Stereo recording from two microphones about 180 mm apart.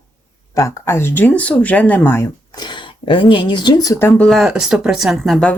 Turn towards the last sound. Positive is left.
turn(degrees=0)  # may be behind; listen again after turning